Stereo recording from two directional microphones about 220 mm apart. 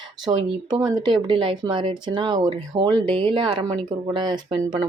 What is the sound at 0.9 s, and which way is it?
Speech, 20° right (ahead or behind).